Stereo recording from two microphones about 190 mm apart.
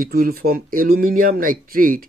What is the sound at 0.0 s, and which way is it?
Speech, 50° right (ahead or behind).